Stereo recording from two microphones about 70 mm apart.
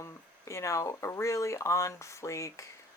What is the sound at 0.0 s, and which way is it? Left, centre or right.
Speech, left.